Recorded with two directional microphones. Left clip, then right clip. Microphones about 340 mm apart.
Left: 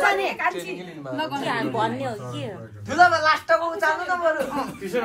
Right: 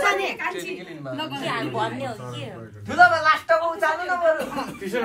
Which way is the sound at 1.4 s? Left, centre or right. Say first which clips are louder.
Left 1 dB; left.